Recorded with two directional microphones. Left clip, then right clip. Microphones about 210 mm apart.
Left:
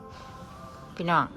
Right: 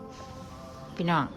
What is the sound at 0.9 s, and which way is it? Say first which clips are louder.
Speech: left 3 dB; 10° right (ahead or behind).